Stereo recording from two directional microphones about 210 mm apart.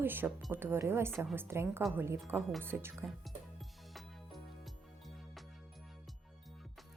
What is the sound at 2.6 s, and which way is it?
Speech, 10° right (ahead or behind).